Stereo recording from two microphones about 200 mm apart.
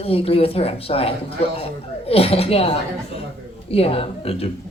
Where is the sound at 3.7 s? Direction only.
30° left (ahead or behind).